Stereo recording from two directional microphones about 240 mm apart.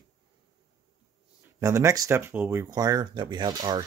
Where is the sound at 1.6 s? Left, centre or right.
Centre.